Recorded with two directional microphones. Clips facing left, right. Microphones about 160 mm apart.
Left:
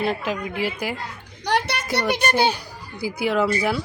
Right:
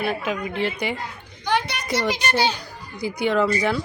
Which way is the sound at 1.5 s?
70° left (ahead or behind).